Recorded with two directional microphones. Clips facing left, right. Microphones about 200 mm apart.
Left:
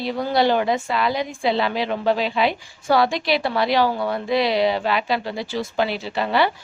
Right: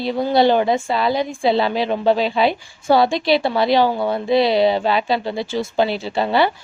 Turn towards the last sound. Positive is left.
turn(degrees=-25)  # may be behind; listen again after turning